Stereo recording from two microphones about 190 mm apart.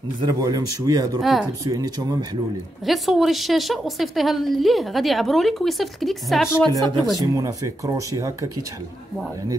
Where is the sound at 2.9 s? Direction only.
Centre (ahead or behind).